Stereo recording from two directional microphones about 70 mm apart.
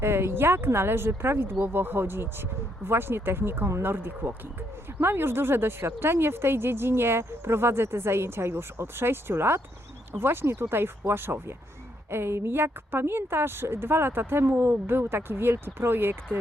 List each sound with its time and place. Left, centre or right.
0.0 s speech: right